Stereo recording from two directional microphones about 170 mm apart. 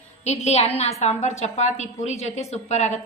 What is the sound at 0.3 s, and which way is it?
A woman's voice, 40° left (ahead or behind).